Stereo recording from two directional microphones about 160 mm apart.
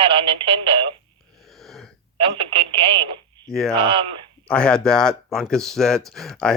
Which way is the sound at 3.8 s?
35° right (ahead or behind).